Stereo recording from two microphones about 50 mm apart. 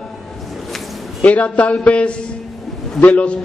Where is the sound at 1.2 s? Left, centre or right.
Left.